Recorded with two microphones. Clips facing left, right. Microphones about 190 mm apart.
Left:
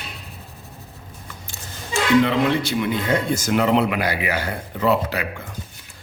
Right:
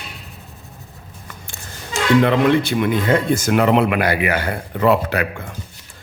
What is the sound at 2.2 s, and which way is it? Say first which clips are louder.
Speech: right 5 dB; 55° right (ahead or behind).